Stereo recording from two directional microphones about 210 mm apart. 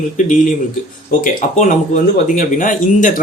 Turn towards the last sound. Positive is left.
turn(degrees=40)  # may be behind; listen again after turning